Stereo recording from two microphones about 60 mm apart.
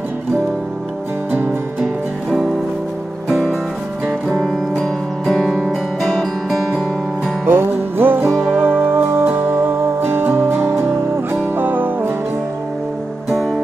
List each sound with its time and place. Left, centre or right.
4.3 s music: centre
7.4 s music: right
10.9 s music: right
13.3 s music: centre